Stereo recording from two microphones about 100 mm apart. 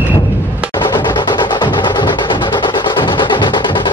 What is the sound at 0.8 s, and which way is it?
Music, 50° left (ahead or behind).